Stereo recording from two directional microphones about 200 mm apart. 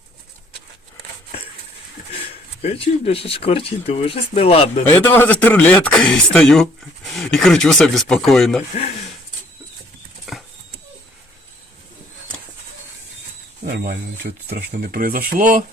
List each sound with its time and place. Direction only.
2.6 s speech: 30° left (ahead or behind)
4.8 s speech: 10° left (ahead or behind)
10.3 s horse: centre (ahead or behind)
13.7 s speech: 50° right (ahead or behind)